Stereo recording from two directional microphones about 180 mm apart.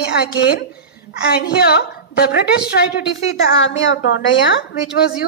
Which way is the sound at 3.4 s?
90° left.